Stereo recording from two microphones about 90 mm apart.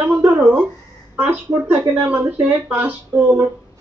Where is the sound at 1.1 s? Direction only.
15° right (ahead or behind).